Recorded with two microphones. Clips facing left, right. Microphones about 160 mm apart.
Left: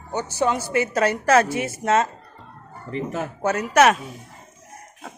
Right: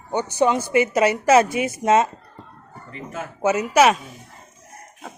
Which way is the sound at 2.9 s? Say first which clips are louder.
Left 6 dB; 35° left (ahead or behind).